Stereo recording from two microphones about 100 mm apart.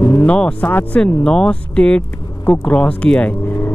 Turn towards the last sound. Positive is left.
turn(degrees=20)  # may be behind; listen again after turning